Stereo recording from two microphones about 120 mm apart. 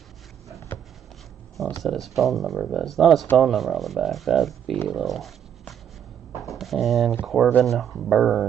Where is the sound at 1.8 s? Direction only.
Centre (ahead or behind).